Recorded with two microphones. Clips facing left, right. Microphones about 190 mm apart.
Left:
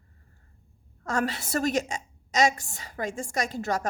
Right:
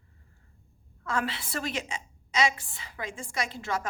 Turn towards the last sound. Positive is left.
turn(degrees=45)  # may be behind; listen again after turning